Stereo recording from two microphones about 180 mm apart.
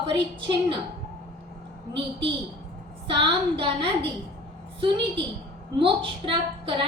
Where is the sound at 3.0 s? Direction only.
30° right (ahead or behind).